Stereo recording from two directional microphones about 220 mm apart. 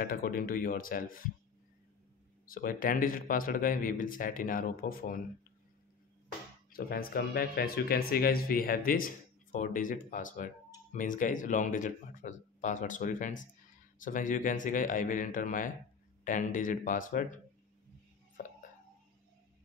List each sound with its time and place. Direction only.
0.0 s speech: 40° left (ahead or behind)
2.5 s speech: 40° left (ahead or behind)
6.7 s speech: 40° left (ahead or behind)